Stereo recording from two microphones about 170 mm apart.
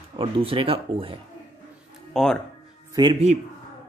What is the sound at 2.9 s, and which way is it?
Speech, 25° right (ahead or behind).